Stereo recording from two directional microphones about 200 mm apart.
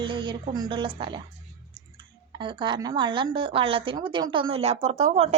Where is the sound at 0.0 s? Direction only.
25° right (ahead or behind).